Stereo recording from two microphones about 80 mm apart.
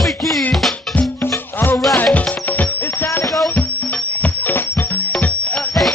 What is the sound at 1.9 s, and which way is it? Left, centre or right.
Music, centre.